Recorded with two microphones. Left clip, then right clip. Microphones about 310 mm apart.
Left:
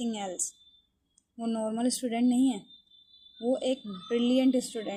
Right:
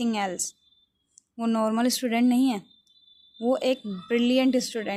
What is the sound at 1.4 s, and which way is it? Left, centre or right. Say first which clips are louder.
Speech: right 6 dB; right.